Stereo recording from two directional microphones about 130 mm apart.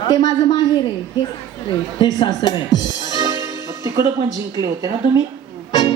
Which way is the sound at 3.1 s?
30° right (ahead or behind).